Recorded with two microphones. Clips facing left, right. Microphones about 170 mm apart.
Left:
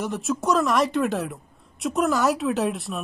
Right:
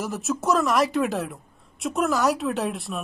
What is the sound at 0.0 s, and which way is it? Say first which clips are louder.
A woman's voice: left 1 dB; centre (ahead or behind).